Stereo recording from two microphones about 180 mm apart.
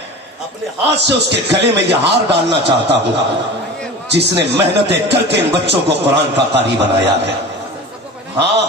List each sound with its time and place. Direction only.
0.8 s speech: 70° right (ahead or behind)
4.1 s speech: 70° right (ahead or behind)
8.4 s speech: 70° right (ahead or behind)